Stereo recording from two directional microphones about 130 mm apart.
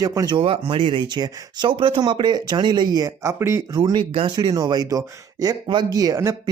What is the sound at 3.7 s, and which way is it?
Speech, 40° right (ahead or behind).